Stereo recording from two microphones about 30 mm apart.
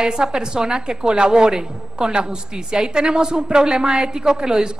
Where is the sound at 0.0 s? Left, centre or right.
Right.